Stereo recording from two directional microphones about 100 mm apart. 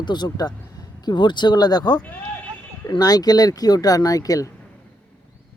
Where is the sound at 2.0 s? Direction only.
15° left (ahead or behind).